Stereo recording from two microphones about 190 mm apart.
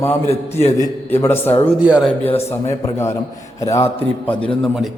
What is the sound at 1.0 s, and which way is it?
Speech, 10° left (ahead or behind).